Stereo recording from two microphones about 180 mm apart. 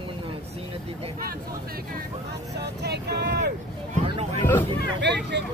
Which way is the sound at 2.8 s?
65° right (ahead or behind).